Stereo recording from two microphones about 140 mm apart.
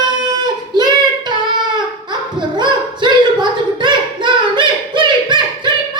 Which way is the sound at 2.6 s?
35° right (ahead or behind).